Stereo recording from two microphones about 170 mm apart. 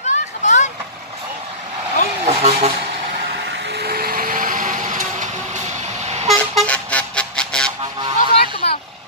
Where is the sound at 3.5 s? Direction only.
85° right; by 5.3 s 50° right (ahead or behind).